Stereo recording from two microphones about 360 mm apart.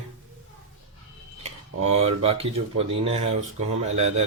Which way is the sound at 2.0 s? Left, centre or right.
Centre.